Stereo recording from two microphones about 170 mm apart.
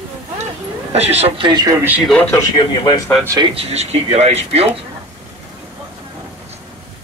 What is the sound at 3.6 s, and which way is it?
Speech, 40° right (ahead or behind).